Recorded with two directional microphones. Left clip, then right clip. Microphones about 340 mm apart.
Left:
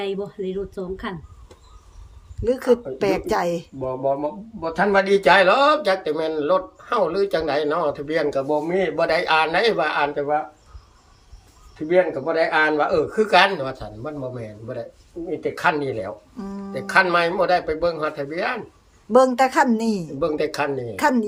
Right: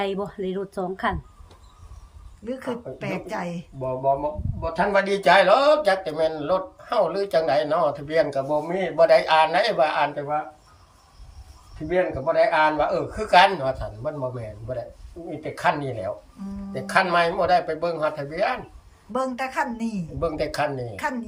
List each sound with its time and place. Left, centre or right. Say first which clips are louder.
0.0 s speech: even; centre
2.4 s speech: left 12 dB; centre
11.9 s speech: left 4 dB; centre
15.5 s speech: left 1 dB; centre
19.1 s speech: left 10 dB; centre